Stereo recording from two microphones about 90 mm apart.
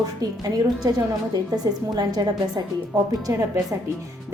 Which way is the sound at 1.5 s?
45° right (ahead or behind).